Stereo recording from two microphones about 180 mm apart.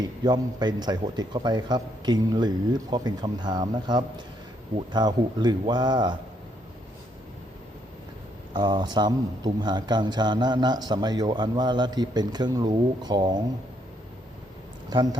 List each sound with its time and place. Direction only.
0.3 s speech: 25° right (ahead or behind)
8.5 s speech: 25° right (ahead or behind)